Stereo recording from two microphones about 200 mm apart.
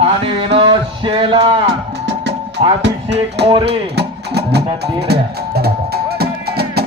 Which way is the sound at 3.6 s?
55° right (ahead or behind).